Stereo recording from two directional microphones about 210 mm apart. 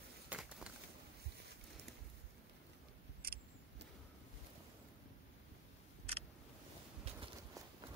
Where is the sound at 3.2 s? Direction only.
45° right (ahead or behind).